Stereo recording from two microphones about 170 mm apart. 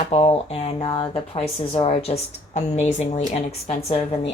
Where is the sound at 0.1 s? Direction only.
40° left (ahead or behind).